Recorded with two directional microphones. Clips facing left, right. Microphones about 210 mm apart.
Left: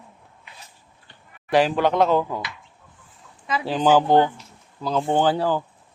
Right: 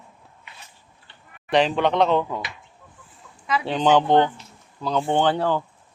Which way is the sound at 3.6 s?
5° left (ahead or behind).